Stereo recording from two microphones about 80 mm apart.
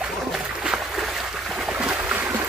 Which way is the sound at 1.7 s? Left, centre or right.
Centre.